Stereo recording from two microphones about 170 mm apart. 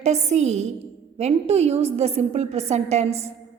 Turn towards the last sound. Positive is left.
turn(degrees=-40)  # may be behind; listen again after turning